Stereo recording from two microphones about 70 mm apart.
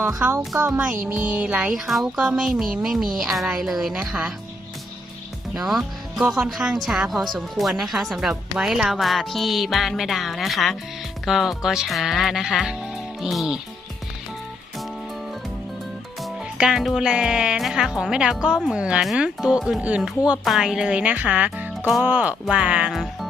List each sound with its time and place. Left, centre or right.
0.3 s speech: right
0.8 s speech: centre
1.6 s speech: centre
5.5 s speech: centre
16.6 s speech: centre
20.7 s speech: centre